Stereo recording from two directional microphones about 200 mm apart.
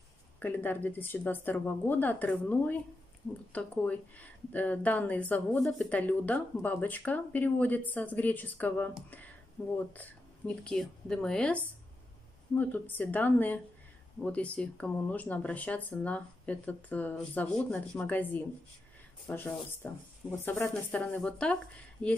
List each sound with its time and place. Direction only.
0.4 s a woman's voice: 10° left (ahead or behind)